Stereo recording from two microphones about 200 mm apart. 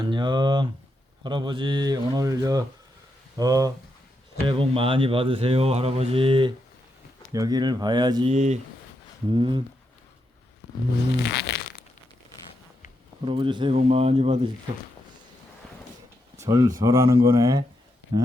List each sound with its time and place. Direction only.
0.0 s speech: 20° right (ahead or behind)
8.3 s speech: 35° right (ahead or behind)
9.3 s speech: 25° right (ahead or behind)
11.2 s a sound: 55° left (ahead or behind)
13.2 s speech: 25° right (ahead or behind)
16.4 s speech: 15° right (ahead or behind)